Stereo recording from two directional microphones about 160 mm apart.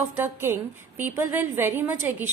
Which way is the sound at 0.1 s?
15° right (ahead or behind).